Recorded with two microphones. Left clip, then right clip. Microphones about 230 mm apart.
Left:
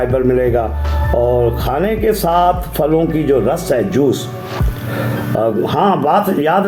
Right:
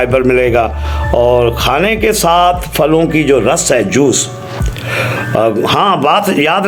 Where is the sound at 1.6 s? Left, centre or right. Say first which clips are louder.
Right 4 dB; centre.